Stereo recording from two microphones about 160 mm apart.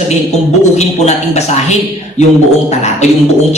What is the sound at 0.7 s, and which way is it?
Speech, 45° left (ahead or behind).